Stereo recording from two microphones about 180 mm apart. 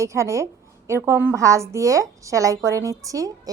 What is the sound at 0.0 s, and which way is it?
A woman's voice, 15° right (ahead or behind).